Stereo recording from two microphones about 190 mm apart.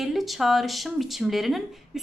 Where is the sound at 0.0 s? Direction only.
Centre (ahead or behind).